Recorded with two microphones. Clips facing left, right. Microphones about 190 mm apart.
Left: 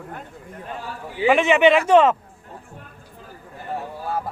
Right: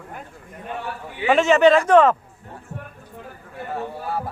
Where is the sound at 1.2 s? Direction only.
10° left (ahead or behind).